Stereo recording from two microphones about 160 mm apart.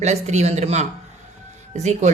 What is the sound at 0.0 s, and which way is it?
Speech, 45° right (ahead or behind).